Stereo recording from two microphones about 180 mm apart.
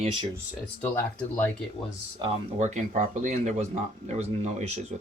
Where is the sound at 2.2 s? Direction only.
25° right (ahead or behind).